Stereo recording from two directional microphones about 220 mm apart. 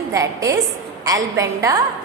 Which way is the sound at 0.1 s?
15° right (ahead or behind).